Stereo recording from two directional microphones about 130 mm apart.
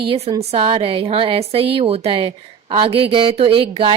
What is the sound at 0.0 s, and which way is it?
A woman's voice, 40° right (ahead or behind).